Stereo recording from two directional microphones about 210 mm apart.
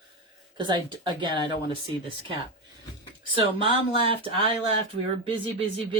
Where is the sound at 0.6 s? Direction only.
20° right (ahead or behind).